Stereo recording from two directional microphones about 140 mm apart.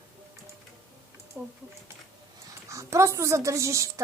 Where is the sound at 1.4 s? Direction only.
15° right (ahead or behind).